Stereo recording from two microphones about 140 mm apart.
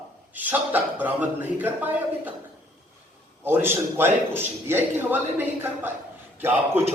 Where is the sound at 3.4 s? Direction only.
15° right (ahead or behind).